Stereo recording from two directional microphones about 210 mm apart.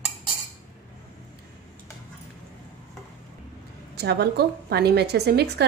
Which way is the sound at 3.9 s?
50° right (ahead or behind).